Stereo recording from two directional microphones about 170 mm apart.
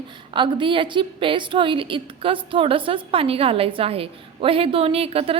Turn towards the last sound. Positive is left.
turn(degrees=-35)  # may be behind; listen again after turning